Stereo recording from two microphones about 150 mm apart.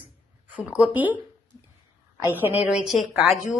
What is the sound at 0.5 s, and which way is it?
A woman's voice, 10° right (ahead or behind).